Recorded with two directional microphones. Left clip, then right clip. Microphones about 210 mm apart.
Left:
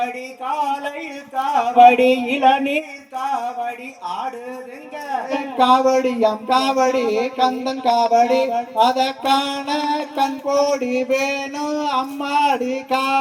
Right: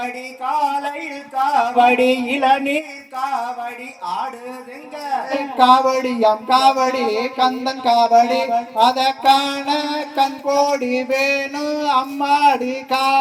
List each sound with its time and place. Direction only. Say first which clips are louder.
0.0 s music: even; 20° right (ahead or behind)